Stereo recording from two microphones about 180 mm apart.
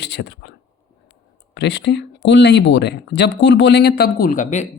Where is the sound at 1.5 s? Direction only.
70° left (ahead or behind).